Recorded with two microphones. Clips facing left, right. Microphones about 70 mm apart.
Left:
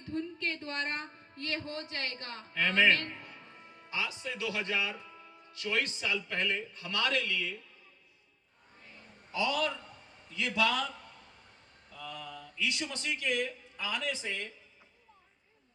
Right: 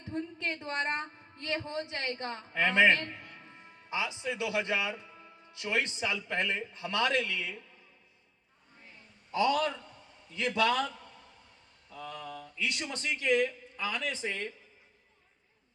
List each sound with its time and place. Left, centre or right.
0.0 s a woman's voice: right
9.3 s a man's voice: right